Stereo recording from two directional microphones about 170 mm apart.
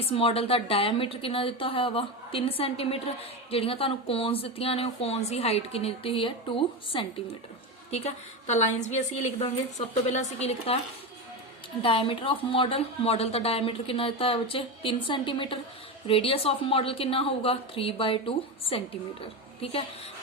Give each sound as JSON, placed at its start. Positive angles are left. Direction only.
{"t": 0.0, "sound": "a woman's voice", "side_deg": 35}
{"t": 11.8, "sound": "a woman's voice", "side_deg": 30}